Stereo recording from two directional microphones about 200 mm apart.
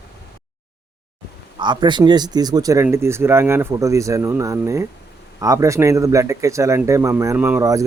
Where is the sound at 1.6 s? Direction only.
25° right (ahead or behind).